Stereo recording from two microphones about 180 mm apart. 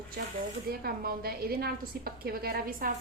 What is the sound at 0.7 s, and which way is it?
A woman's voice, 55° right (ahead or behind).